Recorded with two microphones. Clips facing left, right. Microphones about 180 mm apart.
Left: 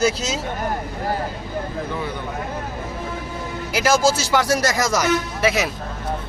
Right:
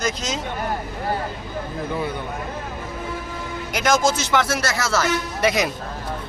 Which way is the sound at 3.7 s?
5° left (ahead or behind).